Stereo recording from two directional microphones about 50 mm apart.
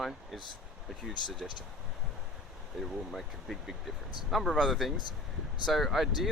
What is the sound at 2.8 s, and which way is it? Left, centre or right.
Speech, centre.